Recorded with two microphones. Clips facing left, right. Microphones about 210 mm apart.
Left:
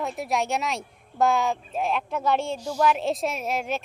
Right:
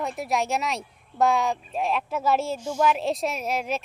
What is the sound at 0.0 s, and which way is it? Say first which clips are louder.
Speech: even; centre (ahead or behind).